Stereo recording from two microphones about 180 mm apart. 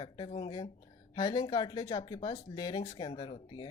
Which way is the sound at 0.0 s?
25° left (ahead or behind).